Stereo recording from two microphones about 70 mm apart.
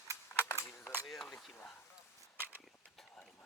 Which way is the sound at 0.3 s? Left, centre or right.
Left.